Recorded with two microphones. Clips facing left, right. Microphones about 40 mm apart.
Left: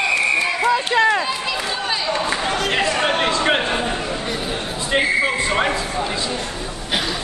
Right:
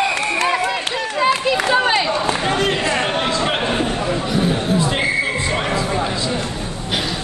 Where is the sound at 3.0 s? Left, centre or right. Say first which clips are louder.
Left 1 dB; left.